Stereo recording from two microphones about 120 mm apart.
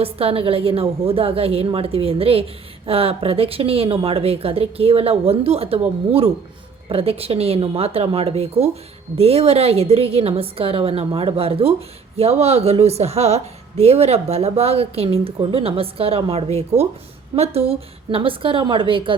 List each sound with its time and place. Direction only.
0.0 s a woman's voice: 55° right (ahead or behind)